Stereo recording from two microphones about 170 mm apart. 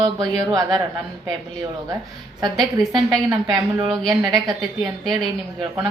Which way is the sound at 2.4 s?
20° right (ahead or behind).